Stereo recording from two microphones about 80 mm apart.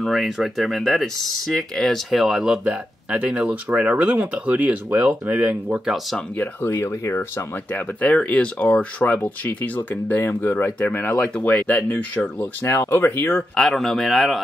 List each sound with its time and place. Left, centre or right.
0.0 s speech: centre
2.7 s speech: centre
6.3 s speech: left
6.7 s speech: left
8.0 s speech: centre
11.3 s speech: centre
13.6 s speech: centre